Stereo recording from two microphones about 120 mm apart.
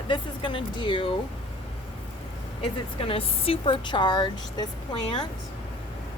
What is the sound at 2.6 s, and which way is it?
A woman's voice, 50° left (ahead or behind).